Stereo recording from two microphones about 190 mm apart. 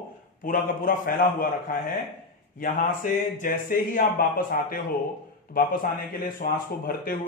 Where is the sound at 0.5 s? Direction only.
45° left (ahead or behind).